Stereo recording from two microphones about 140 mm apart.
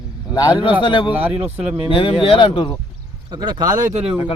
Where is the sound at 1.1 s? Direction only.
10° right (ahead or behind).